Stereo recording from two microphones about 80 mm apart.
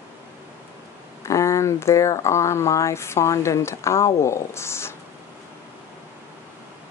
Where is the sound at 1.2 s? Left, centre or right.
Left.